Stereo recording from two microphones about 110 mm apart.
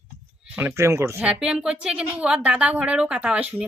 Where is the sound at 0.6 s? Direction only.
20° right (ahead or behind).